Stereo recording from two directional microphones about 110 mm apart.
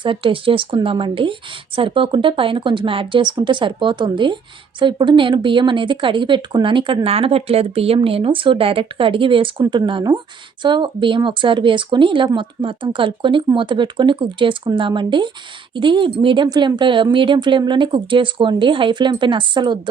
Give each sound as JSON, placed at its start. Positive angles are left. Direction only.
{"t": 0.0, "sound": "speech", "side_deg": -50}